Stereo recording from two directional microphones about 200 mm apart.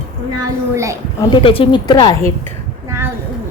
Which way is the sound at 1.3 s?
25° left (ahead or behind).